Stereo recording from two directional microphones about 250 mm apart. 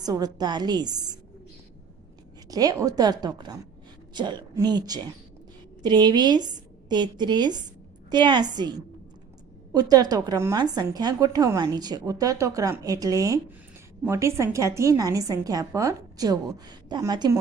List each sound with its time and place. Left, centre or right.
0.0 s a woman's voice: centre
2.5 s a woman's voice: centre
9.7 s a woman's voice: centre